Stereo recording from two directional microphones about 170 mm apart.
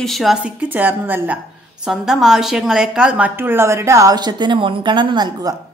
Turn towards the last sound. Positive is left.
turn(degrees=-25)  # may be behind; listen again after turning